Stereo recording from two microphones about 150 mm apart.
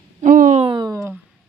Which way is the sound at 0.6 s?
35° right (ahead or behind).